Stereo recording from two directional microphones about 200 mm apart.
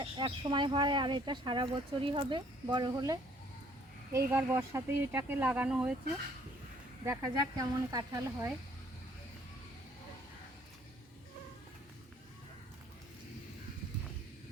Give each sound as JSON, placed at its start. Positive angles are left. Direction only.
{"t": 0.0, "sound": "speech", "side_deg": -25}
{"t": 4.3, "sound": "speech", "side_deg": -10}
{"t": 7.0, "sound": "speech", "side_deg": -15}